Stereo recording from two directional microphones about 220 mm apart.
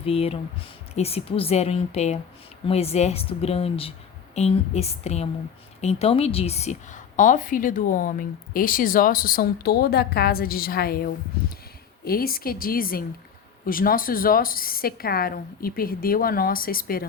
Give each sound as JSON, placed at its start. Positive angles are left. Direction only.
{"t": 0.0, "sound": "a woman's voice", "side_deg": 25}